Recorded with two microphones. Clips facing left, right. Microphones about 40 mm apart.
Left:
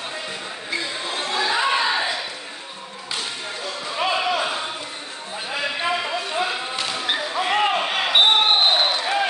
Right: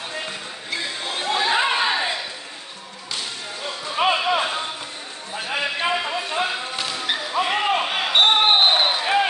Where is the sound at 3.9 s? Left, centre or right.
Right.